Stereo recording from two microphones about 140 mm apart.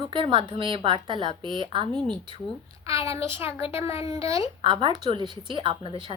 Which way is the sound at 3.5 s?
40° left (ahead or behind).